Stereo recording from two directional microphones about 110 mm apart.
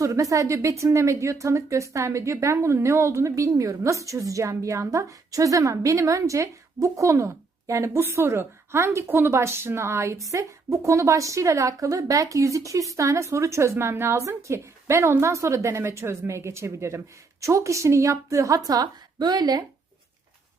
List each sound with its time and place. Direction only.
0.0 s a woman's voice: 30° right (ahead or behind)